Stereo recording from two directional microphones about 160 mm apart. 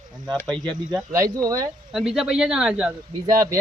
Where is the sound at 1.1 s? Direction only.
20° right (ahead or behind).